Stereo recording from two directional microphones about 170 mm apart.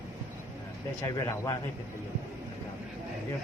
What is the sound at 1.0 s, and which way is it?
Speech, 20° left (ahead or behind).